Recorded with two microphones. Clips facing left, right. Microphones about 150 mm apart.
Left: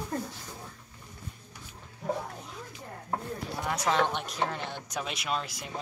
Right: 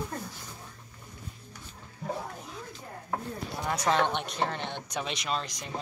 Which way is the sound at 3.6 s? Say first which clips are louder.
Right 1 dB; centre (ahead or behind).